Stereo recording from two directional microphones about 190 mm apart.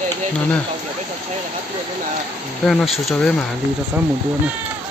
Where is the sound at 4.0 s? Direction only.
5° right (ahead or behind).